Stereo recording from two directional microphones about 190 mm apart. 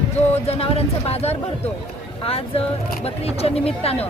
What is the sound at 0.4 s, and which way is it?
Speech, 30° left (ahead or behind).